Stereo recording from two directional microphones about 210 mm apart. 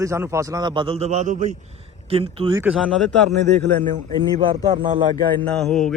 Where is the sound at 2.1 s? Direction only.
25° right (ahead or behind).